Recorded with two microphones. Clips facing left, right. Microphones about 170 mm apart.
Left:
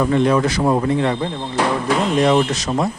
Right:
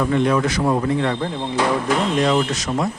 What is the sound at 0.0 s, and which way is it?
A man's voice, 30° left (ahead or behind).